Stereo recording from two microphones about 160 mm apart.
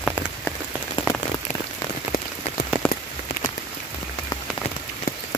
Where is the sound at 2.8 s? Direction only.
10° left (ahead or behind).